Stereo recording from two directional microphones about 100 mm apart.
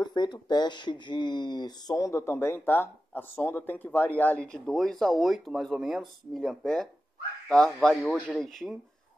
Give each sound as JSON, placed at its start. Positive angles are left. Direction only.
{"t": 0.0, "sound": "speech", "side_deg": 45}
{"t": 2.0, "sound": "speech", "side_deg": 30}